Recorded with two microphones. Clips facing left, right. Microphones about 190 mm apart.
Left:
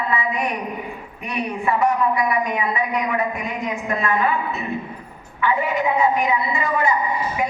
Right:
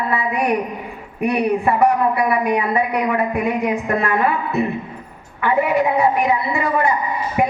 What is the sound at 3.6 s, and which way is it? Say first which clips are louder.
Speech: right 4 dB; 60° right (ahead or behind).